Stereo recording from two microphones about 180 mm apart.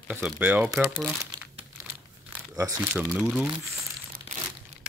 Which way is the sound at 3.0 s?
5° right (ahead or behind).